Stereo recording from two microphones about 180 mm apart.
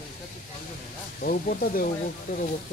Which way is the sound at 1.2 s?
55° left (ahead or behind).